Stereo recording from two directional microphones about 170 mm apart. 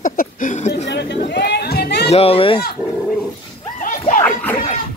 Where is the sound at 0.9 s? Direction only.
90° left; by 2.1 s 75° left (ahead or behind).